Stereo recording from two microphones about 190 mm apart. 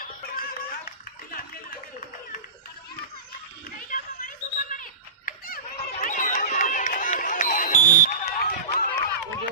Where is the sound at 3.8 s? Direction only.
45° left (ahead or behind).